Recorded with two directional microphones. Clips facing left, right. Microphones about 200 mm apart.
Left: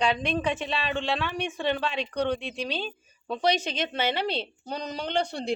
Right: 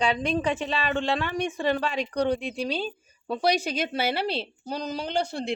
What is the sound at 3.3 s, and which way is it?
A woman's voice, 10° right (ahead or behind).